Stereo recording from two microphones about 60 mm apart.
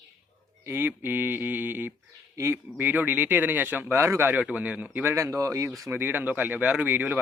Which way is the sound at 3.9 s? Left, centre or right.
Right.